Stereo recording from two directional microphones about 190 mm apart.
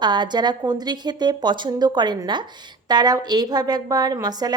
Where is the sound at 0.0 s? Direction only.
25° right (ahead or behind).